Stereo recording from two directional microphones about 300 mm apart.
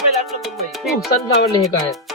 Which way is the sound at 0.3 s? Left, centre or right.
Centre.